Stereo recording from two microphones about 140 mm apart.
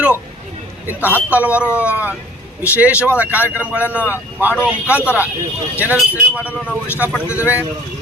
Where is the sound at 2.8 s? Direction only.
10° right (ahead or behind).